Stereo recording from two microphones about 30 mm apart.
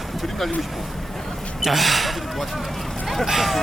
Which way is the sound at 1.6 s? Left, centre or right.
Centre.